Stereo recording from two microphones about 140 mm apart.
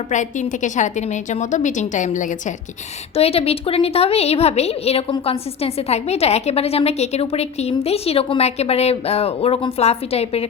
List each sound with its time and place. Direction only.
0.1 s a woman's voice: 60° left (ahead or behind)
3.2 s a woman's voice: 45° left (ahead or behind)